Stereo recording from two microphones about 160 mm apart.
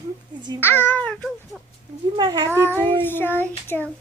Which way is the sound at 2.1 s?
25° right (ahead or behind).